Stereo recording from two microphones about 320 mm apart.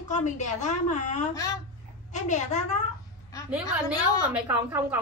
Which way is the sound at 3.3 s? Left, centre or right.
Centre.